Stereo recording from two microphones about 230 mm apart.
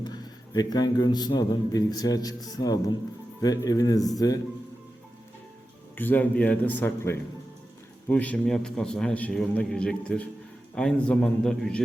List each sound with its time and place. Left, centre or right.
0.0 s a man's voice: centre
6.0 s a man's voice: centre